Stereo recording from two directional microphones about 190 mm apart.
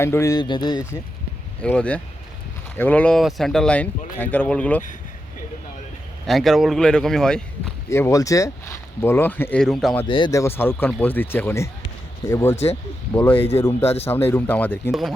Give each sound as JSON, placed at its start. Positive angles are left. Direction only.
{"t": 0.0, "sound": "speech", "side_deg": 15}
{"t": 1.6, "sound": "speech", "side_deg": 5}
{"t": 6.2, "sound": "speech", "side_deg": 0}
{"t": 7.9, "sound": "speech", "side_deg": 15}
{"t": 10.1, "sound": "speech", "side_deg": 25}
{"t": 13.8, "sound": "speech", "side_deg": 30}
{"t": 14.3, "sound": "speech", "side_deg": 10}